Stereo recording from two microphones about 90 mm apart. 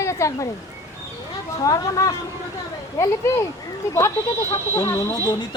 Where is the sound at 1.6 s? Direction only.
40° left (ahead or behind).